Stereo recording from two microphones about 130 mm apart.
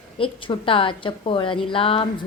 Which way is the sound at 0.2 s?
40° left (ahead or behind).